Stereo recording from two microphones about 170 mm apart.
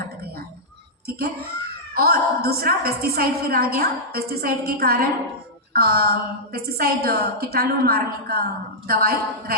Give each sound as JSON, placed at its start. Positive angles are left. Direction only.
{"t": 1.0, "sound": "a woman's voice", "side_deg": -65}